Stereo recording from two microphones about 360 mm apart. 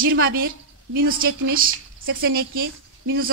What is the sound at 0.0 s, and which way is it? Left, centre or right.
A woman's voice, right.